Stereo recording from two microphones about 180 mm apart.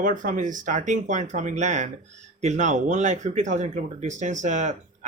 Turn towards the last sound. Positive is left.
turn(degrees=-40)  # may be behind; listen again after turning